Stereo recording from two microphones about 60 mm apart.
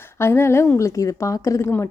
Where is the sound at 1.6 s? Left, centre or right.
Left.